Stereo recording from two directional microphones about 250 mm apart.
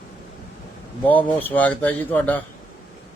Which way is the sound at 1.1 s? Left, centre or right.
Centre.